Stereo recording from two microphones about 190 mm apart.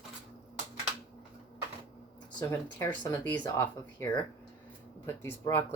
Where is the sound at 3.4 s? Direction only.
15° left (ahead or behind).